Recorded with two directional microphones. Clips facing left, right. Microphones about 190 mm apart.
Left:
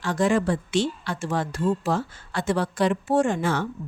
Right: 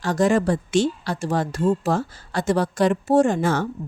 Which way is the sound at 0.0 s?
40° right (ahead or behind).